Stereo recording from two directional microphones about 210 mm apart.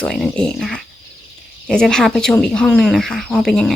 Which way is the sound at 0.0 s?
5° left (ahead or behind).